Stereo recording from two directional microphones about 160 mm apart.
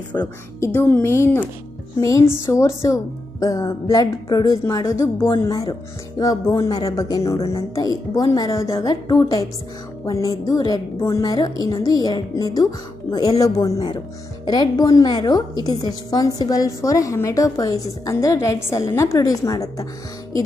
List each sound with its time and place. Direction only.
0.1 s a woman's voice: 15° left (ahead or behind)